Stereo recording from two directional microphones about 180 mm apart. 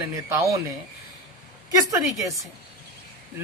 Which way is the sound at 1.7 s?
20° right (ahead or behind).